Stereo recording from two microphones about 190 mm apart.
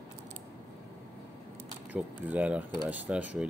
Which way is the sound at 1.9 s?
10° right (ahead or behind).